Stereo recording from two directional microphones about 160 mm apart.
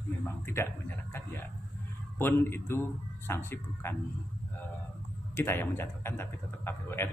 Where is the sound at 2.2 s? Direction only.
15° left (ahead or behind).